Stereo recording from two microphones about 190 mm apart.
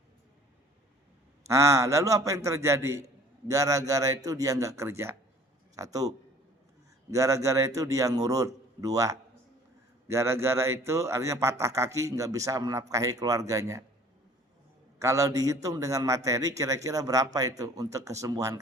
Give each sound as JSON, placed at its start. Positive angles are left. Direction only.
{"t": 1.5, "sound": "a man's voice", "side_deg": -15}
{"t": 14.9, "sound": "a man's voice", "side_deg": -15}